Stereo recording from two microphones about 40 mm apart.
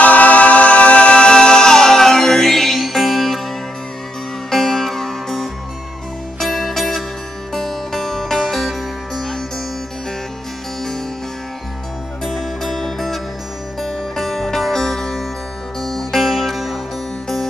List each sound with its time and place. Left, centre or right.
0.0 s music: left; by 3.4 s centre
4.5 s music: centre
12.3 s music: centre